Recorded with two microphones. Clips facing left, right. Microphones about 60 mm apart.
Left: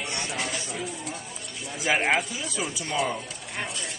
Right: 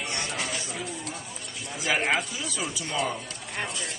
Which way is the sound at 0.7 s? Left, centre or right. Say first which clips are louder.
Left 1 dB; centre.